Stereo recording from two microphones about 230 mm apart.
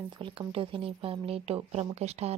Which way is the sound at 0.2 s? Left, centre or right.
Right.